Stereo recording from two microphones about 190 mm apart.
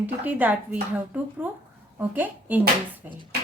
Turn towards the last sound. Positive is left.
turn(degrees=-10)  # may be behind; listen again after turning